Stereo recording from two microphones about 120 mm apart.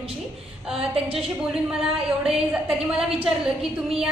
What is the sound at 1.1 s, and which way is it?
A woman's voice, 5° right (ahead or behind).